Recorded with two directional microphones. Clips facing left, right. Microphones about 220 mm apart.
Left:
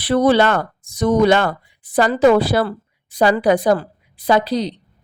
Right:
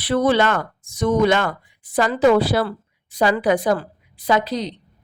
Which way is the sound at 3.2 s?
35° left (ahead or behind).